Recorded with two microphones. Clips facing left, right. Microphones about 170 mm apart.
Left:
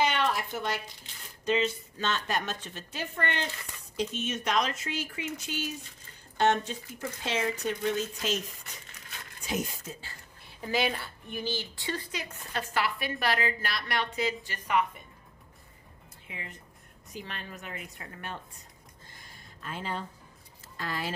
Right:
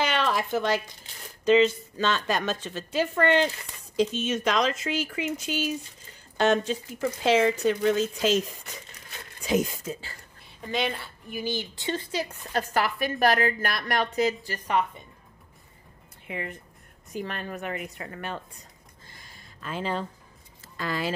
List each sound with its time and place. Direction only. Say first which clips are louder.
0.0 s a sound: right 2 dB; 90° right
1.4 s speech: right 8 dB; 90° right
9.4 s speech: right 8 dB; 90° right
10.4 s speech: even; 5° left (ahead or behind)
11.4 s speech: right 5 dB; 20° right (ahead or behind); by 14.9 s 35° right (ahead or behind)
16.3 s speech: right 10 dB; 60° right (ahead or behind)
17.1 s a woman's voice: right 8 dB; 50° right (ahead or behind); by 18.4 s 90° right
19.2 s a sound: right 4 dB; 90° right
20.7 s speech: right 5 dB; 90° right